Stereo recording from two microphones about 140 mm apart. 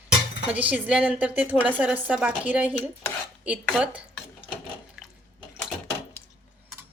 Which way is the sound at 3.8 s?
10° right (ahead or behind).